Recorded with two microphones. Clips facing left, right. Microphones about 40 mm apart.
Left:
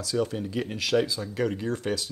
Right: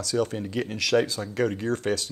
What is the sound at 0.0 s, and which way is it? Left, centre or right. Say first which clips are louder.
Speech: right 1 dB; right.